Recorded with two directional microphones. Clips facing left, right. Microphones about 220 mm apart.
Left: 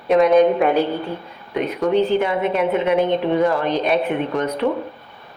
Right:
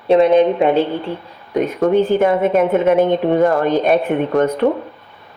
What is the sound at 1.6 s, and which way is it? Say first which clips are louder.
A woman's voice: right 3 dB; 50° right (ahead or behind).